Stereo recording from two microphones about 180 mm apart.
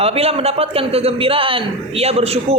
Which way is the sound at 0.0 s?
35° right (ahead or behind).